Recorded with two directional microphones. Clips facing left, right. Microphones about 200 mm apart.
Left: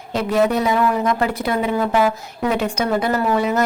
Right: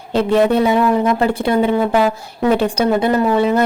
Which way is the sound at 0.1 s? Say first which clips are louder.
Right 4 dB; 30° right (ahead or behind).